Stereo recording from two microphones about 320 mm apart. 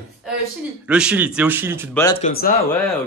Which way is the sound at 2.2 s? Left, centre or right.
Left.